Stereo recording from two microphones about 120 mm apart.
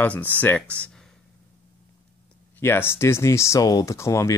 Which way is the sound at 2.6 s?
20° left (ahead or behind).